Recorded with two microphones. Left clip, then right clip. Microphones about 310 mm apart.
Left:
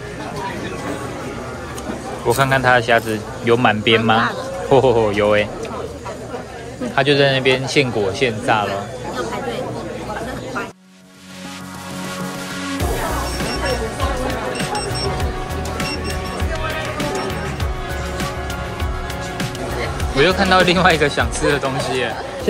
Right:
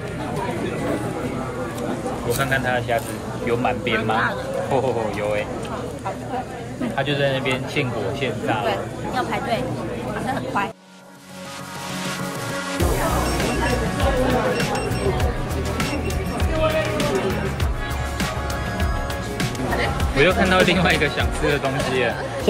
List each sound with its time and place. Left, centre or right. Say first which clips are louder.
2.3 s a man's voice: left 8 dB; left
7.0 s a man's voice: left 7 dB; left
20.2 s speech: left 3 dB; centre